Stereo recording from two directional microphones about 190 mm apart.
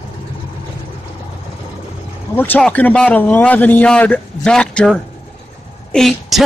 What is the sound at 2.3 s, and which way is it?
A man's voice, 10° left (ahead or behind).